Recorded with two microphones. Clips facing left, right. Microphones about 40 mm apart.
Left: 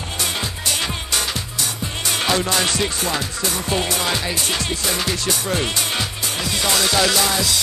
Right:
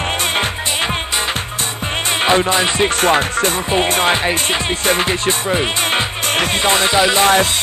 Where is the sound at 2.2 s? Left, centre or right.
Right.